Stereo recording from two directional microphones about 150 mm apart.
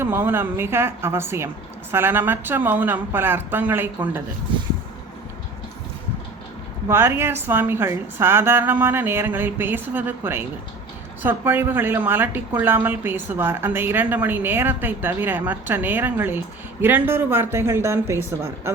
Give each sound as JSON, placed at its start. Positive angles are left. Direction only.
{"t": 0.0, "sound": "a woman's voice", "side_deg": -15}
{"t": 6.8, "sound": "a woman's voice", "side_deg": -15}